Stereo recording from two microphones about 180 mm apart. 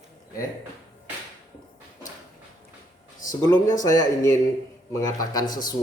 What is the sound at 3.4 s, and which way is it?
Speech, 20° left (ahead or behind).